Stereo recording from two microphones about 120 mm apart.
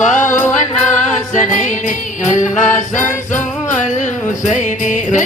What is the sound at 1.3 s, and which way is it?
Music, 90° left.